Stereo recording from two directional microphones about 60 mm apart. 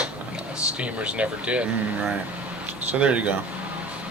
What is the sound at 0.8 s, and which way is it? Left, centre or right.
Speech, centre.